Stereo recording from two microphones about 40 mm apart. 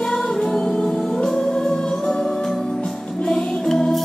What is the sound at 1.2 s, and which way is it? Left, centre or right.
Music, centre.